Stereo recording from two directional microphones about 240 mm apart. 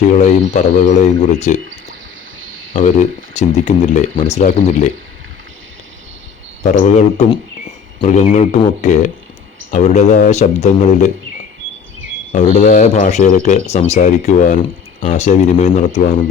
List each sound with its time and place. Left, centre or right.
0.2 s speech: left
2.7 s speech: left
6.6 s speech: left
11.9 s a sound: right
12.3 s speech: left